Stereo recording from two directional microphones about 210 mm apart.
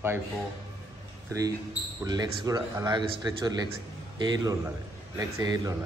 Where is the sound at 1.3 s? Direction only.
15° right (ahead or behind).